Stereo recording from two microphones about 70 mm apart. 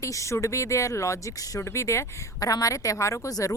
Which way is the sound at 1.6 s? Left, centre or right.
Left.